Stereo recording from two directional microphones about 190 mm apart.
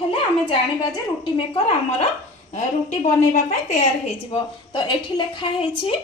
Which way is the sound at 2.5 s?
40° left (ahead or behind).